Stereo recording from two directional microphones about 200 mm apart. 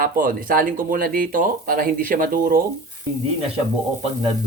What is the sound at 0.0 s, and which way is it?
Speech, 45° right (ahead or behind).